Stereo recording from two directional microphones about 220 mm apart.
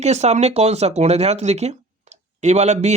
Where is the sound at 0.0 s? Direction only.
30° right (ahead or behind).